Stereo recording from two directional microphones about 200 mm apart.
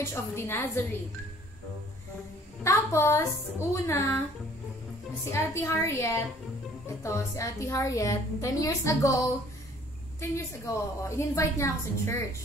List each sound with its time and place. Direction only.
0.0 s a woman's voice: 10° left (ahead or behind)
2.6 s a woman's voice: 15° left (ahead or behind)
5.3 s a woman's voice: 15° left (ahead or behind)
10.3 s a woman's voice: 15° left (ahead or behind)